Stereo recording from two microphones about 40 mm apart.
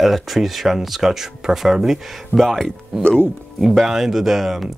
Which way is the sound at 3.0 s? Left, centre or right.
Left.